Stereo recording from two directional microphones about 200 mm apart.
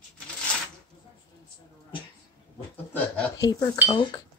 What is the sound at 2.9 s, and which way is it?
Dishes, 15° left (ahead or behind).